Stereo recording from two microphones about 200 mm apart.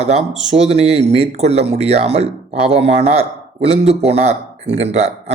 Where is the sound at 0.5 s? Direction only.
30° right (ahead or behind).